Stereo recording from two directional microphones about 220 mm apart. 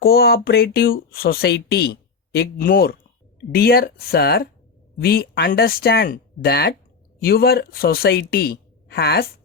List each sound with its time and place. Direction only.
0.0 s speech: 45° left (ahead or behind)